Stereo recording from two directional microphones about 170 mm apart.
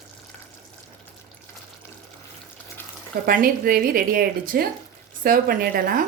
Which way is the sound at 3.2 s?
55° right (ahead or behind).